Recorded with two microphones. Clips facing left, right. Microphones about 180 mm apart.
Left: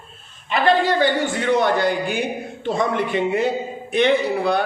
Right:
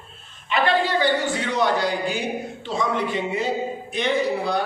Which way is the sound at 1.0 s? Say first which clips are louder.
Left 3 dB; 55° left (ahead or behind).